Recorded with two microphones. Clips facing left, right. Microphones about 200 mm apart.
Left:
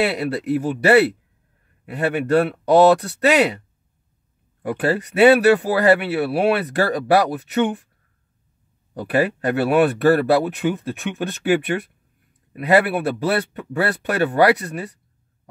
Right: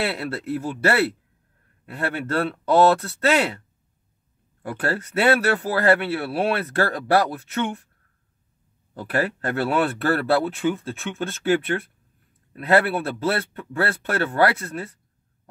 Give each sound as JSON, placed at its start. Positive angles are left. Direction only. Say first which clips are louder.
{"t": 0.0, "sound": "speech", "louder": "left 5 dB", "side_deg": 15}
{"t": 4.6, "sound": "speech", "louder": "left 5 dB", "side_deg": 15}
{"t": 8.9, "sound": "speech", "louder": "left 5 dB", "side_deg": 15}